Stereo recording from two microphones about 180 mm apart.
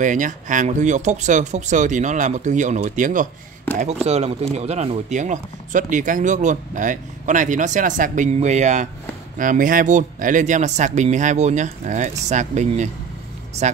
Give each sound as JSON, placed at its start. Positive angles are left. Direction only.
{"t": 0.0, "sound": "speech", "side_deg": -45}